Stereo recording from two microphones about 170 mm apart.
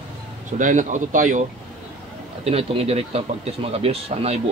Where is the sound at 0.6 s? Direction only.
50° right (ahead or behind).